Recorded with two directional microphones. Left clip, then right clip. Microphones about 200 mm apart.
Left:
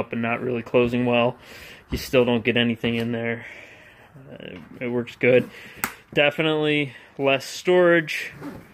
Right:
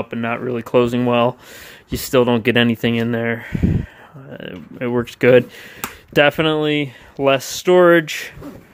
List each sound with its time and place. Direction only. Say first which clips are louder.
0.0 s speech: right 3 dB; 15° right (ahead or behind)